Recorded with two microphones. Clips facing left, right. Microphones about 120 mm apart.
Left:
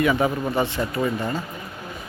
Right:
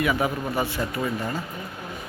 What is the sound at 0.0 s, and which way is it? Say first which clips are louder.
Speech: left 3 dB; 10° right (ahead or behind).